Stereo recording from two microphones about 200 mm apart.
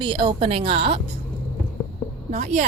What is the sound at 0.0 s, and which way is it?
A woman's voice, 25° right (ahead or behind).